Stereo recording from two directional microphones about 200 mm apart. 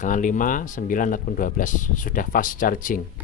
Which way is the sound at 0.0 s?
40° left (ahead or behind).